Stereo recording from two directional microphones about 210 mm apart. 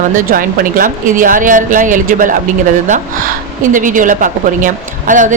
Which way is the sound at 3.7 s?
40° right (ahead or behind).